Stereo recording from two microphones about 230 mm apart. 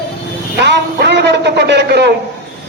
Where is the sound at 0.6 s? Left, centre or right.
Right.